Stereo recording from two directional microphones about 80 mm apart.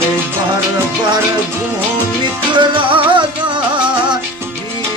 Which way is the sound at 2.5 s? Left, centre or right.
Right.